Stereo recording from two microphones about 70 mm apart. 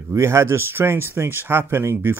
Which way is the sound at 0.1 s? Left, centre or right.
Right.